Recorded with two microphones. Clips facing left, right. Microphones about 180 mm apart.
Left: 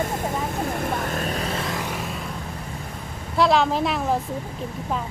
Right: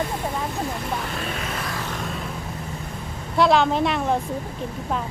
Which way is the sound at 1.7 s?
15° left (ahead or behind).